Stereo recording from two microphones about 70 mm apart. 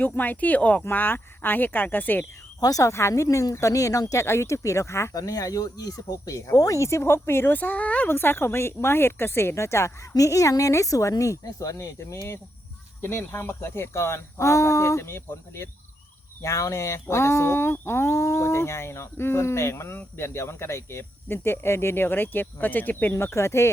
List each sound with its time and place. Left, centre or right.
0.0 s speech: left
2.6 s speech: left
4.1 s speech: left
5.1 s speech: left
8.0 s speech: left
13.0 s speech: left
23.1 s speech: left